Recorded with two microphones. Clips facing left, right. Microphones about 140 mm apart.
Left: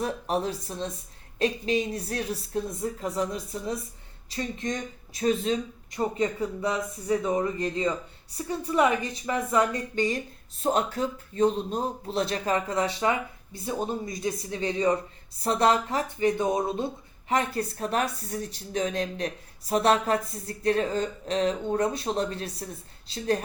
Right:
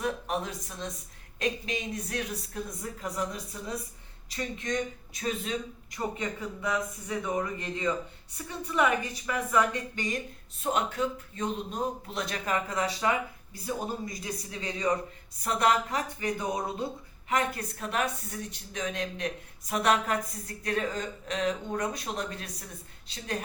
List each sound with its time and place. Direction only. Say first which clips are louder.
0.0 s speech: left 4 dB; 35° left (ahead or behind)